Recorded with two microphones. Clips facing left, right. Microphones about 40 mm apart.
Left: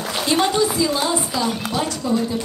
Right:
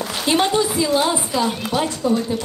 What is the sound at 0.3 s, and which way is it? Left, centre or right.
A woman's voice, right.